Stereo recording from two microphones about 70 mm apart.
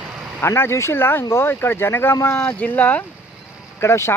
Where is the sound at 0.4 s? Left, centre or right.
Left.